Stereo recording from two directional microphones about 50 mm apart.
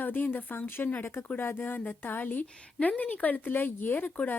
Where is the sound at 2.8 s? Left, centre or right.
Left.